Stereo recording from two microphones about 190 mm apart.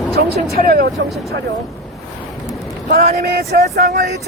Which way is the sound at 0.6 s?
50° right (ahead or behind).